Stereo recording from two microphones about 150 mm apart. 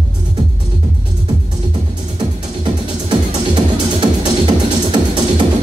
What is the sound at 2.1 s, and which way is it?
Music, 30° right (ahead or behind).